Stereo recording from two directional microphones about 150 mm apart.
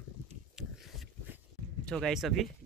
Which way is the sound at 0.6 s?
5° right (ahead or behind).